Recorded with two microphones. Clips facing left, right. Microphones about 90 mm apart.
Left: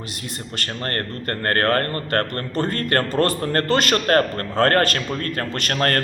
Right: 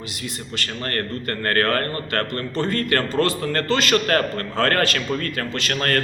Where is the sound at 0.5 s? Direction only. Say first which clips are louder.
Even; 40° left (ahead or behind).